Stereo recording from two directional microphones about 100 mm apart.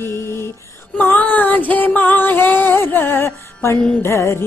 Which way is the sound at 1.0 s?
15° left (ahead or behind).